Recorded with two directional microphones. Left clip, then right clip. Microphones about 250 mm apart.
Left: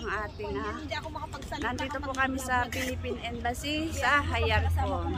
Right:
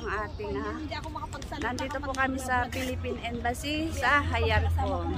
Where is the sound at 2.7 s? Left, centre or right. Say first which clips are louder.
Even; left.